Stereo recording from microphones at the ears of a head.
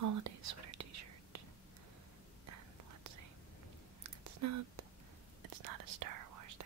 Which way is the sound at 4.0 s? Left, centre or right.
Right.